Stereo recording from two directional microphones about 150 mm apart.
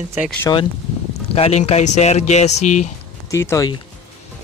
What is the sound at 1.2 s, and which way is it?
Speech, 40° left (ahead or behind).